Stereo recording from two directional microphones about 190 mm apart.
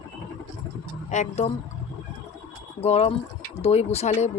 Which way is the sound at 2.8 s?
35° left (ahead or behind).